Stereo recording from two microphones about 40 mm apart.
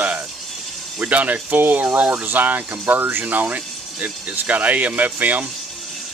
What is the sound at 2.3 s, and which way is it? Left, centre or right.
Speech, right.